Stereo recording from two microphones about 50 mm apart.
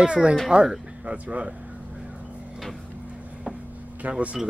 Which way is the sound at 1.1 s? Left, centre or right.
Right.